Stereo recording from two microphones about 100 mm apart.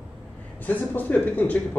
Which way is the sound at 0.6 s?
15° left (ahead or behind).